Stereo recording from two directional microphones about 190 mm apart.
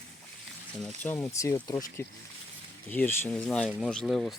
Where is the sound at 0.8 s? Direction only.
10° left (ahead or behind).